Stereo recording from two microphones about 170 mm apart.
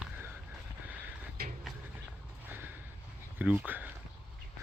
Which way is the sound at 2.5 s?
10° right (ahead or behind).